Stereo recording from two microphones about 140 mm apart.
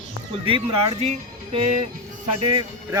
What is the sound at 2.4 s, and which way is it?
Speech, 35° right (ahead or behind).